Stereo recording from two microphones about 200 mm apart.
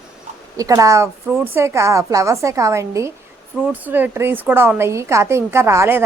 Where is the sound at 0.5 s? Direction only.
15° right (ahead or behind).